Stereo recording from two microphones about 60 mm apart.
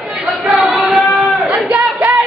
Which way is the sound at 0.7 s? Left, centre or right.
Centre.